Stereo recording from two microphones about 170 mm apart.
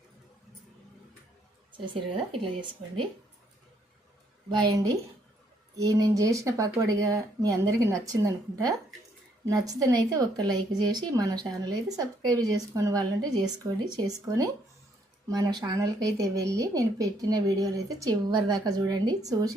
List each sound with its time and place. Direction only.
2.6 s speech: 30° right (ahead or behind)
4.4 s speech: 25° right (ahead or behind)